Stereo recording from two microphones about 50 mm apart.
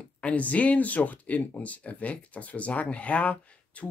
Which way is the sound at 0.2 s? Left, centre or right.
Left.